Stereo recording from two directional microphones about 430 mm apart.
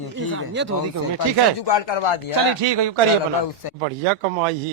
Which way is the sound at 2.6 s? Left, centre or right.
Right.